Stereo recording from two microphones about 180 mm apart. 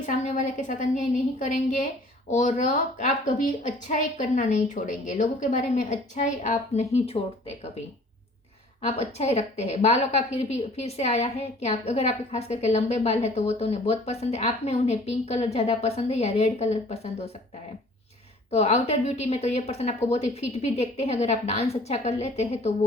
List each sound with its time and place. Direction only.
0.0 s a woman's voice: 45° left (ahead or behind)
8.9 s a woman's voice: 35° left (ahead or behind)
18.5 s a woman's voice: 35° left (ahead or behind)